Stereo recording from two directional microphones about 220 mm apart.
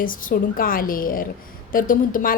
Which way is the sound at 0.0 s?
40° left (ahead or behind).